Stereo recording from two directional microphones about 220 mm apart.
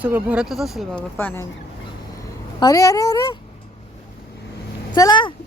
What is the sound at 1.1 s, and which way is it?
Speech, 10° left (ahead or behind).